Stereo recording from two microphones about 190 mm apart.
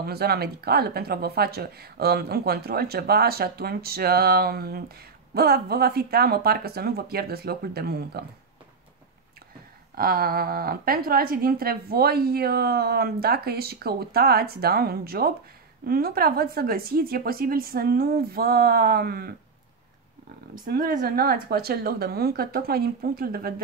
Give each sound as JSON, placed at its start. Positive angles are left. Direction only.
{"t": 0.0, "sound": "speech", "side_deg": -55}
{"t": 9.9, "sound": "a woman's voice", "side_deg": -50}
{"t": 20.6, "sound": "a woman's voice", "side_deg": -50}